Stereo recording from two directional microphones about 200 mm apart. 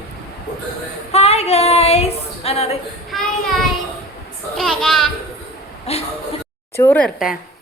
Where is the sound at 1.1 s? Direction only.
30° left (ahead or behind).